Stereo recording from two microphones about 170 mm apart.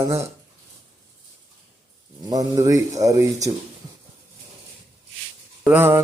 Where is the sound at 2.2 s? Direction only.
20° right (ahead or behind).